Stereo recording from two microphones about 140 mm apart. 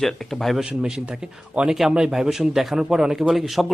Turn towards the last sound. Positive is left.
turn(degrees=0)  # may be behind; listen again after turning